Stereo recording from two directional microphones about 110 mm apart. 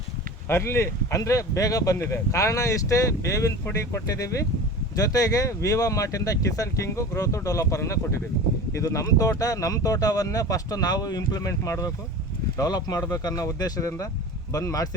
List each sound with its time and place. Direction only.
0.4 s speech: 25° left (ahead or behind)